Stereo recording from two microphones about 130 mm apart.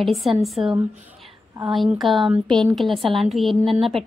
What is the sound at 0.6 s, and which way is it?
Speech, 40° right (ahead or behind).